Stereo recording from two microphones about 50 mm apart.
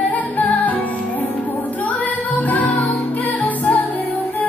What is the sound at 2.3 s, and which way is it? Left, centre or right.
Music, left.